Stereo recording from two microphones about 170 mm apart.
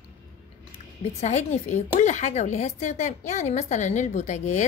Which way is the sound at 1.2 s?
40° left (ahead or behind).